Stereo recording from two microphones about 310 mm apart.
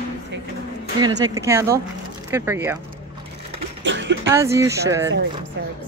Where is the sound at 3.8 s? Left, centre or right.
Right.